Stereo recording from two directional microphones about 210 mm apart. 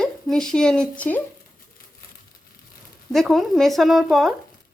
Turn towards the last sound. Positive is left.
turn(degrees=0)  # may be behind; listen again after turning